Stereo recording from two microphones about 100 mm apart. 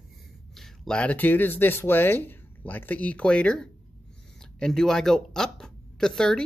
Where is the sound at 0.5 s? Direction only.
5° left (ahead or behind).